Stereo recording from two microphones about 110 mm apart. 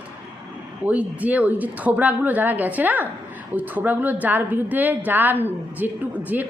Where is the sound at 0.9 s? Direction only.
15° right (ahead or behind).